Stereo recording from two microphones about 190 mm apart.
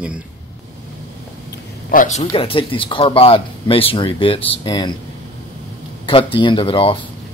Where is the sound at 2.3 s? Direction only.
30° left (ahead or behind).